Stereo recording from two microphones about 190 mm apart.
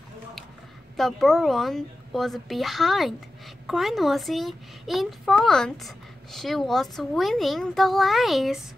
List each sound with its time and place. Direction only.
0.9 s a child's voice: centre (ahead or behind)